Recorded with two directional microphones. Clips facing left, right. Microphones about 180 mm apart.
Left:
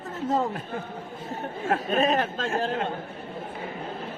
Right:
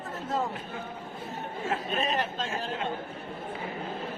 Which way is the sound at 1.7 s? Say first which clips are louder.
Left 7 dB; 50° left (ahead or behind).